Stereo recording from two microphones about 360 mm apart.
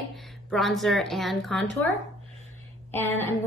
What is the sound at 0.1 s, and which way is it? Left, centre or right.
A woman's voice, centre.